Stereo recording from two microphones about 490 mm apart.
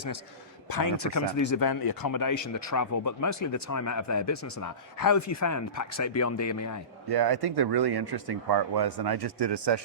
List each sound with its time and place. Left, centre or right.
0.7 s speech: left
7.1 s speech: right